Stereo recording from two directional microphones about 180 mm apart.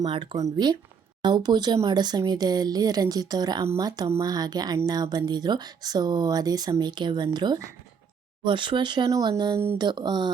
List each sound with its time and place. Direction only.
0.0 s speech: 25° right (ahead or behind)